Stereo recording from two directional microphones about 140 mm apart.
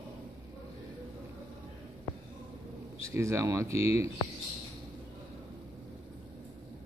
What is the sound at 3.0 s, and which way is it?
Speech, 20° right (ahead or behind).